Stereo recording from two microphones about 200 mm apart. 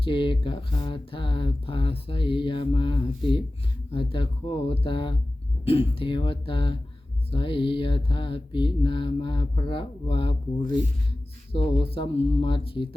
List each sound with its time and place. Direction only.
0.0 s mantra: 25° left (ahead or behind)